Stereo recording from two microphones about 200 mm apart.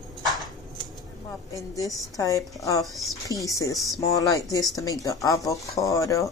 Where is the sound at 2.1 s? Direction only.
15° left (ahead or behind).